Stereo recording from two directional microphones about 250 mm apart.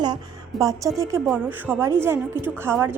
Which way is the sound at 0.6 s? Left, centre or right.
Centre.